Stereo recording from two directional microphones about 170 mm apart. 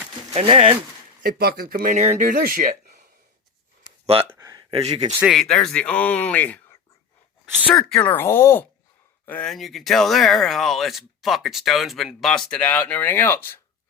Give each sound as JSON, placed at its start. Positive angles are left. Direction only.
{"t": 0.3, "sound": "speech", "side_deg": -35}
{"t": 1.2, "sound": "speech", "side_deg": -65}
{"t": 2.0, "sound": "speech", "side_deg": -45}
{"t": 4.0, "sound": "speech", "side_deg": -35}
{"t": 4.4, "sound": "a sound", "side_deg": -20}
{"t": 4.9, "sound": "speech", "side_deg": -40}
{"t": 5.2, "sound": "speech", "side_deg": 0}
{"t": 7.9, "sound": "speech", "side_deg": 15}